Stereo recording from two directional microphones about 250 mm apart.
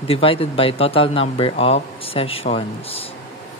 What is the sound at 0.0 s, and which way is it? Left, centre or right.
Speech, left.